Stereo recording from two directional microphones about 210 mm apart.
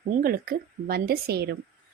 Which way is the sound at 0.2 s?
45° right (ahead or behind).